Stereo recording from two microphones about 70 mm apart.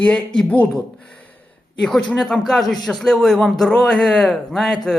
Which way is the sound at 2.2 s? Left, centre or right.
Centre.